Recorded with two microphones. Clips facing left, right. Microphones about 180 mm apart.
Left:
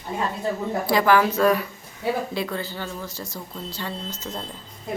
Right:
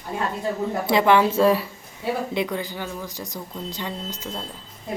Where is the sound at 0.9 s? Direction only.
25° right (ahead or behind).